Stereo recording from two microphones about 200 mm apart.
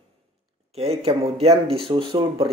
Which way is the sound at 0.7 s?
30° right (ahead or behind).